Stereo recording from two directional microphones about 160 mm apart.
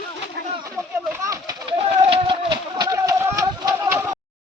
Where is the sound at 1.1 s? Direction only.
20° right (ahead or behind).